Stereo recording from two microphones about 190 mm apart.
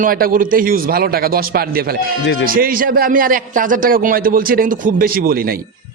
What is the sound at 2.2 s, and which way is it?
Speech, 65° left (ahead or behind).